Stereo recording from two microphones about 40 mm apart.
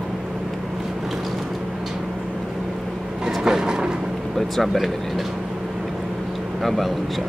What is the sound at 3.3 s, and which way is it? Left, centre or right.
Vehicle, centre.